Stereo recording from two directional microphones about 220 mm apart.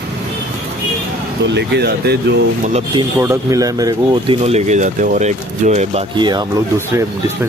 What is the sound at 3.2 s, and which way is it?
Speech, 15° right (ahead or behind).